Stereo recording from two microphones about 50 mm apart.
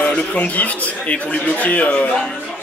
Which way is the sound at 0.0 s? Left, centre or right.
Left.